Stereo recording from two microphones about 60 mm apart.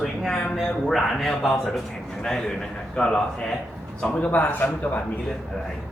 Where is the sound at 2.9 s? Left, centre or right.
Centre.